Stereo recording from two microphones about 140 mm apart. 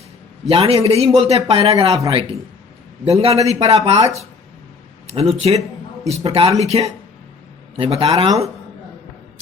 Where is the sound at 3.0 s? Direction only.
45° right (ahead or behind).